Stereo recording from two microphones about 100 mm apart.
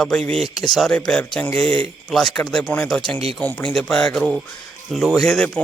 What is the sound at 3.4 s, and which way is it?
Speech, 15° left (ahead or behind).